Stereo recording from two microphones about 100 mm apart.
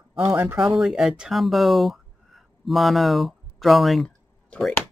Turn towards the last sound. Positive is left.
turn(degrees=5)  # may be behind; listen again after turning